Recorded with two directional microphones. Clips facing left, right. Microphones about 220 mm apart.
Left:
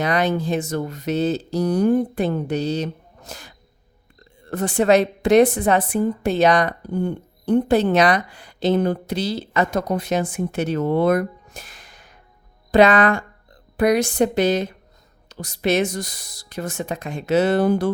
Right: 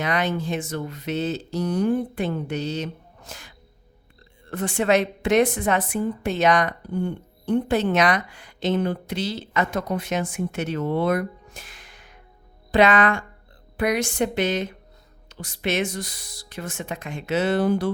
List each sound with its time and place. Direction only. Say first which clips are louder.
0.0 s a woman's voice: left 4 dB; 40° left (ahead or behind)